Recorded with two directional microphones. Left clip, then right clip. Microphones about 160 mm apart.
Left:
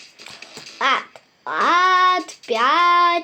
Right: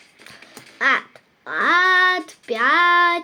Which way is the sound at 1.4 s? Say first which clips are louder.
Even; 30° right (ahead or behind).